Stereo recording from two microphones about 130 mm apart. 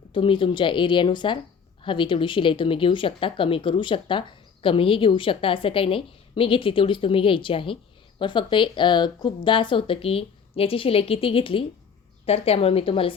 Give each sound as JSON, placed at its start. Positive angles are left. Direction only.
{"t": 0.1, "sound": "speech", "side_deg": 40}